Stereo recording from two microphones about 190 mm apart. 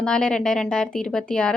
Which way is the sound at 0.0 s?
5° left (ahead or behind).